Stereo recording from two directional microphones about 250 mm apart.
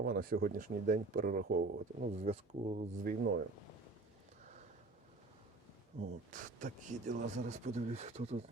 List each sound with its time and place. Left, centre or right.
0.0 s speech: right
6.0 s speech: right